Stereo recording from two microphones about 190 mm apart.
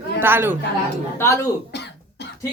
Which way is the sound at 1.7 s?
60° left (ahead or behind).